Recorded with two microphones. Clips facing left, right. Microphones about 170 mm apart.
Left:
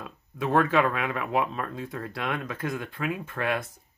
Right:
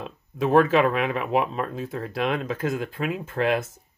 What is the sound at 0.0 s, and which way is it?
Speech, 25° right (ahead or behind).